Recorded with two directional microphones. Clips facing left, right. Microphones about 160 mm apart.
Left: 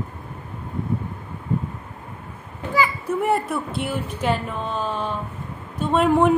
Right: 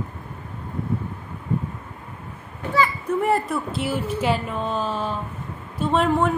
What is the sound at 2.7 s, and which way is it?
A child's voice, 5° left (ahead or behind).